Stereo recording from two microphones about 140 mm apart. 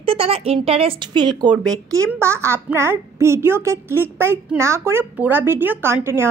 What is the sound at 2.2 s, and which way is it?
A child's voice, 20° right (ahead or behind).